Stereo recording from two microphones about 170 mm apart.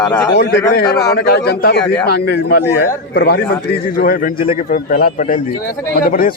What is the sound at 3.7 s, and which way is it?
Speech, 60° left (ahead or behind).